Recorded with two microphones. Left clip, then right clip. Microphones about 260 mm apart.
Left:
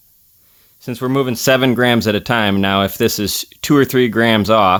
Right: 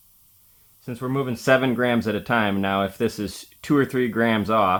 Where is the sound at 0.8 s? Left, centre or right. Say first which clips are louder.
Left 9 dB; left.